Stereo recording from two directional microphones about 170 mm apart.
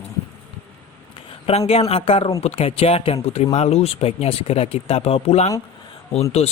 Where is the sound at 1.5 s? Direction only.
35° left (ahead or behind).